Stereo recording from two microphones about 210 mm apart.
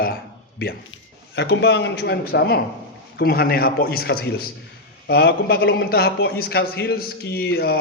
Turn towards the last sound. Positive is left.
turn(degrees=50)  # may be behind; listen again after turning